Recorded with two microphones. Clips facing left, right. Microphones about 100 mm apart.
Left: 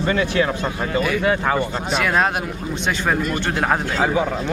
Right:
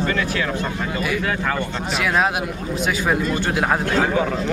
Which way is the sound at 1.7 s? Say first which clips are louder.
Left 1 dB; centre (ahead or behind).